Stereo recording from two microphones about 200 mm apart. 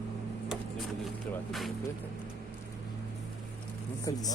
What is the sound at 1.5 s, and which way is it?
Speech, centre (ahead or behind).